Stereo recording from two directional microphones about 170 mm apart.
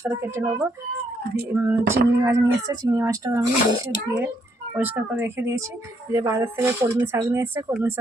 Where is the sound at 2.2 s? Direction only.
20° right (ahead or behind).